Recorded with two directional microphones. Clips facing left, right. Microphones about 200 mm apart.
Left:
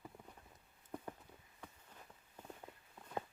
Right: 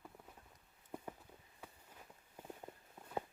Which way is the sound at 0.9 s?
10° right (ahead or behind).